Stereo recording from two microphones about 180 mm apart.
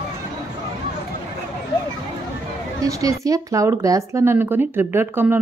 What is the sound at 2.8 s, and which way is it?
A woman's voice, 20° right (ahead or behind).